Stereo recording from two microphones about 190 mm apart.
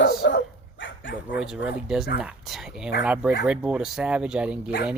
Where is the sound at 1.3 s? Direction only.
5° right (ahead or behind).